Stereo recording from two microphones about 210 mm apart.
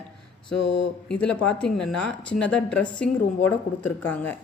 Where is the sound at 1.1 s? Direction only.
5° left (ahead or behind).